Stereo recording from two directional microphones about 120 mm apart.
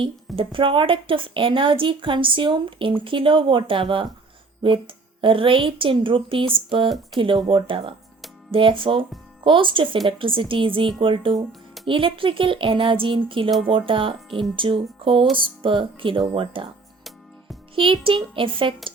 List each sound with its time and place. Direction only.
0.3 s a woman's voice: 45° right (ahead or behind)
17.7 s a woman's voice: 45° right (ahead or behind)